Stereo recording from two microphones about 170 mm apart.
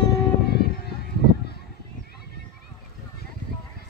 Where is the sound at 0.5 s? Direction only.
70° left (ahead or behind).